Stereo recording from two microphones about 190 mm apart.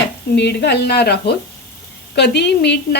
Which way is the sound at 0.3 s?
60° left (ahead or behind).